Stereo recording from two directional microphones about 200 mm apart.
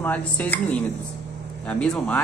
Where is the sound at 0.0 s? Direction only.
10° left (ahead or behind).